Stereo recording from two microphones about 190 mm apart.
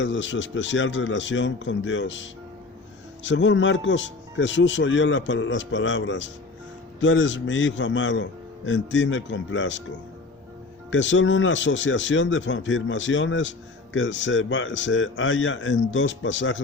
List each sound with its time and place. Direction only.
0.0 s speech: 75° left (ahead or behind)
10.9 s speech: 75° left (ahead or behind)